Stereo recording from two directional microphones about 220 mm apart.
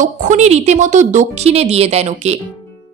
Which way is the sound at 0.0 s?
35° right (ahead or behind).